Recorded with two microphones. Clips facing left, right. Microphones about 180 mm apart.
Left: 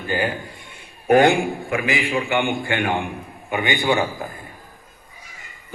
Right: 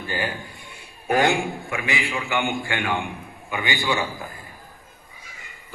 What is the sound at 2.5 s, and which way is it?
A man's voice, 20° left (ahead or behind).